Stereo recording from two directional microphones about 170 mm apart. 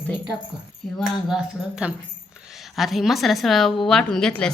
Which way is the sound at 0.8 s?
Centre (ahead or behind).